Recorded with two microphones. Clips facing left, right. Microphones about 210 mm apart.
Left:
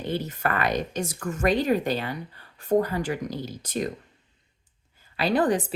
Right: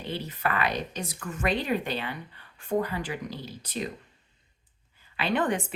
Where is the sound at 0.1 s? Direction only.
45° left (ahead or behind).